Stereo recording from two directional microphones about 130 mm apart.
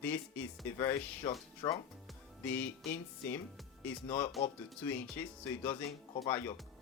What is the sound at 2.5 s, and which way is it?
Speech, 15° left (ahead or behind).